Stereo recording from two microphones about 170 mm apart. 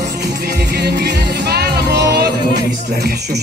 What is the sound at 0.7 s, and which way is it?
Music, 70° right (ahead or behind).